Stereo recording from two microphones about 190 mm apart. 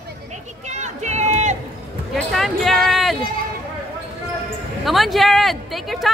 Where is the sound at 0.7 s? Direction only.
40° right (ahead or behind).